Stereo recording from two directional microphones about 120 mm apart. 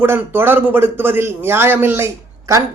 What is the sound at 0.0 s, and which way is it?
Speech, 20° right (ahead or behind).